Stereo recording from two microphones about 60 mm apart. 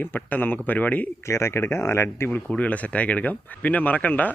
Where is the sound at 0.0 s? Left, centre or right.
Left.